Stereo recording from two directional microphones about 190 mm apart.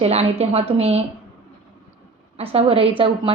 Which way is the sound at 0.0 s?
35° right (ahead or behind).